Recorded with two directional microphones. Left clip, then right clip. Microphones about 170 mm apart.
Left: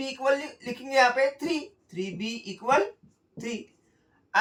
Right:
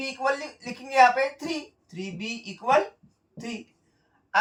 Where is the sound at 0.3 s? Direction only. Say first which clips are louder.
Left 3 dB; 20° right (ahead or behind).